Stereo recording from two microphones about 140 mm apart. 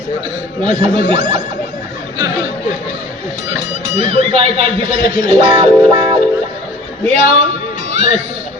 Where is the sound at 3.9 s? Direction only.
45° right (ahead or behind).